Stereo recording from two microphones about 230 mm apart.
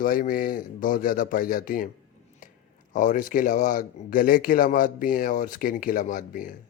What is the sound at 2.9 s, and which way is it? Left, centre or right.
Speech, left.